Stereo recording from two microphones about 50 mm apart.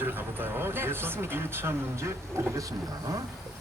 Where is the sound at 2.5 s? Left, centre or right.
Right.